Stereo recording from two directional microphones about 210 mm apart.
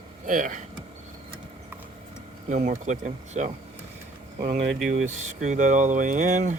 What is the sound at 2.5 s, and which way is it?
Speech, 35° right (ahead or behind).